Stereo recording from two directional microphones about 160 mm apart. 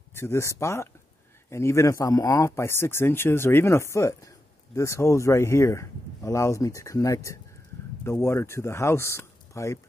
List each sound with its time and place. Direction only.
0.1 s speech: 15° left (ahead or behind)